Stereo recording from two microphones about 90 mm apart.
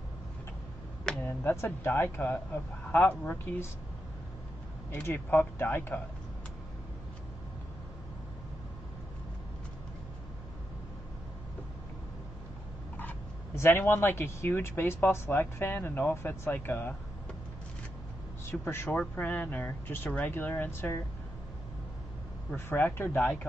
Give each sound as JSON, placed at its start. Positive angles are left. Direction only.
{"t": 1.2, "sound": "speech", "side_deg": 30}
{"t": 5.0, "sound": "speech", "side_deg": 25}
{"t": 13.6, "sound": "speech", "side_deg": 30}
{"t": 18.4, "sound": "speech", "side_deg": 25}
{"t": 18.9, "sound": "speech", "side_deg": 15}
{"t": 22.7, "sound": "speech", "side_deg": 25}